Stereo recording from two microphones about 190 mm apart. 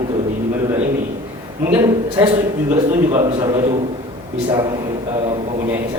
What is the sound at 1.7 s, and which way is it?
Speech, 15° right (ahead or behind).